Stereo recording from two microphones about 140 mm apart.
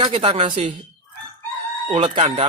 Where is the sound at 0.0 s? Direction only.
40° right (ahead or behind).